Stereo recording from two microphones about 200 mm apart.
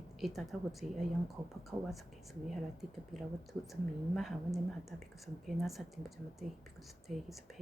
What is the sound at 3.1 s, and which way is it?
Speech, centre (ahead or behind).